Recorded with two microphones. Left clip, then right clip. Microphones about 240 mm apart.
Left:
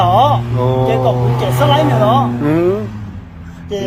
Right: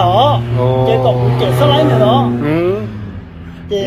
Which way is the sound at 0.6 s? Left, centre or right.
Left.